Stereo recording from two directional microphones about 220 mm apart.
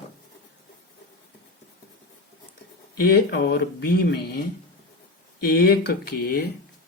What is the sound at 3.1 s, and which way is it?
Speech, 45° left (ahead or behind).